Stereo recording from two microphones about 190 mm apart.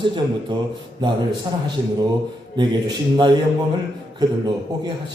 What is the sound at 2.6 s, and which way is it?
Speech, 25° right (ahead or behind).